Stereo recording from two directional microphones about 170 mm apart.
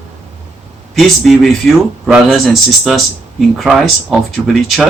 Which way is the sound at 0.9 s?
Centre (ahead or behind).